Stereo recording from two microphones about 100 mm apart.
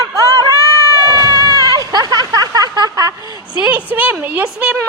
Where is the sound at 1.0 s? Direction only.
35° right (ahead or behind).